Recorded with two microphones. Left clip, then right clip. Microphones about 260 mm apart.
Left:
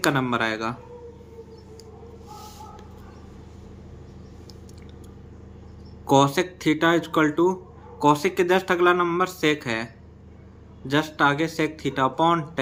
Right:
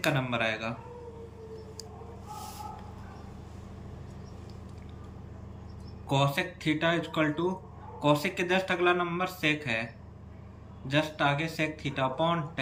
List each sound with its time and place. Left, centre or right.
0.0 s speech: centre
6.1 s speech: centre